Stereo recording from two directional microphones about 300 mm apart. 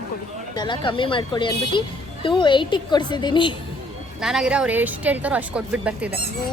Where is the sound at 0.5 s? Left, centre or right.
Centre.